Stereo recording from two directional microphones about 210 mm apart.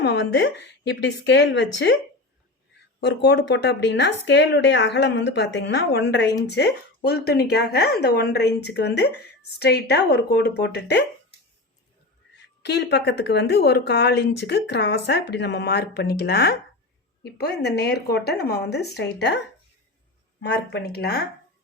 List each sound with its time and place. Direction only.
0.0 s speech: 55° left (ahead or behind)
3.0 s speech: 55° left (ahead or behind)
12.6 s speech: 50° left (ahead or behind)
20.4 s speech: 50° left (ahead or behind)